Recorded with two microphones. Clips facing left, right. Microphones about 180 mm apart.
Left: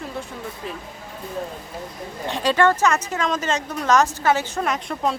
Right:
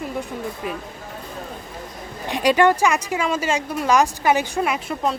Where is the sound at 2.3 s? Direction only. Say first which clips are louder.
Right 2 dB; 15° right (ahead or behind).